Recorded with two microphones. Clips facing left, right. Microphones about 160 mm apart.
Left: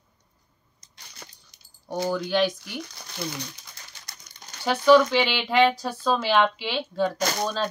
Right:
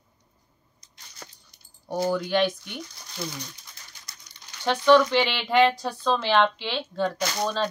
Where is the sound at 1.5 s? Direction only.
90° left.